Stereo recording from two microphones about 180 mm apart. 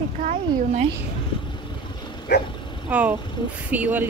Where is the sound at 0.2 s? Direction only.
50° right (ahead or behind).